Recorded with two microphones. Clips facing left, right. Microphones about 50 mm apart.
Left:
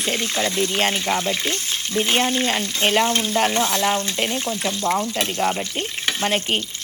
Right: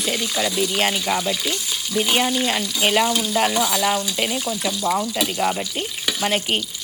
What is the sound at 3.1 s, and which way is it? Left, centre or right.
Frying, left.